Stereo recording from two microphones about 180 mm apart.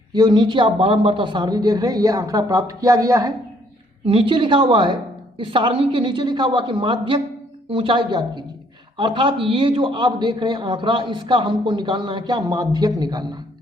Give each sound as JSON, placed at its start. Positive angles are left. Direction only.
{"t": 0.1, "sound": "a man's voice", "side_deg": -25}